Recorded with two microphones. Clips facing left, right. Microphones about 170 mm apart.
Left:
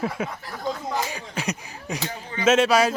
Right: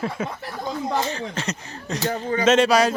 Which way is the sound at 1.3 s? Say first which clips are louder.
Even; 10° left (ahead or behind).